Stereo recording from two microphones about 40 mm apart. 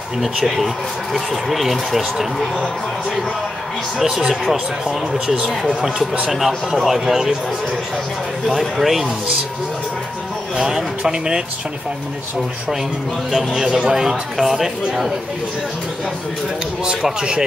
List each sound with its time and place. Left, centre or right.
0.2 s speech: centre
4.0 s speech: centre
5.2 s speech: centre
8.5 s speech: centre
10.5 s speech: centre
13.3 s speech: centre
16.8 s speech: centre